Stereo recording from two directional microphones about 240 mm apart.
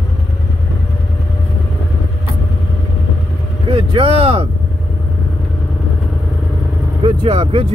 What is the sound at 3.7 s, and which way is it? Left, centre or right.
Vehicle, right.